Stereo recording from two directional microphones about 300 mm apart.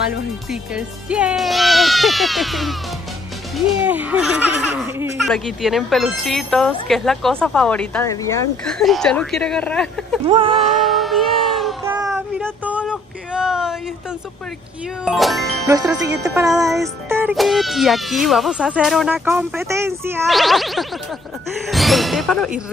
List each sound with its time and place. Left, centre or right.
0.5 s a child's voice: centre
10.2 s music: centre
10.7 s child singing: centre
12.4 s a sound: centre
15.0 s a child's voice: centre
15.7 s music: centre
16.7 s a child's voice: centre
21.6 s a sound: centre